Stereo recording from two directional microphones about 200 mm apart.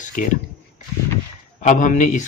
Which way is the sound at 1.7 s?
40° left (ahead or behind).